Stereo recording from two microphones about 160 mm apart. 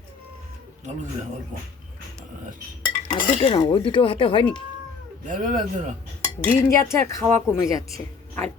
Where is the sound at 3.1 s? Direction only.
45° left (ahead or behind).